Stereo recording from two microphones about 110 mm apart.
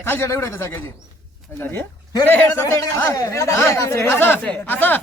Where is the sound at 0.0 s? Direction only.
20° left (ahead or behind).